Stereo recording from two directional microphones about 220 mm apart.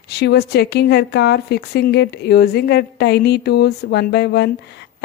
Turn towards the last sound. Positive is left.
turn(degrees=50)  # may be behind; listen again after turning